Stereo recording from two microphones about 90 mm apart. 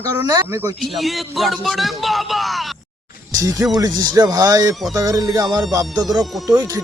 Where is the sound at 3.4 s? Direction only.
35° right (ahead or behind).